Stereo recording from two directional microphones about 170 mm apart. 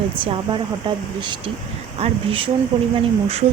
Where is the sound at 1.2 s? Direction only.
25° right (ahead or behind).